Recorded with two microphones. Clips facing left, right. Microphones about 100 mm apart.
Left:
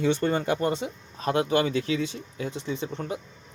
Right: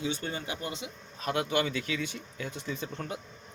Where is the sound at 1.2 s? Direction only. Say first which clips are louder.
Left 6 dB; 35° left (ahead or behind).